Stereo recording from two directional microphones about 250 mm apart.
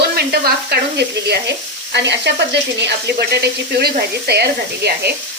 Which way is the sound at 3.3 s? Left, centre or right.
Right.